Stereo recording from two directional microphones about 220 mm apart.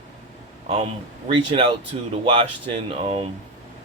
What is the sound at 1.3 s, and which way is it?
Speech, 25° right (ahead or behind).